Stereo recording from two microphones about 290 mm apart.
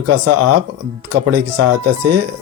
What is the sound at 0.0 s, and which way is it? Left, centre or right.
Speech, right.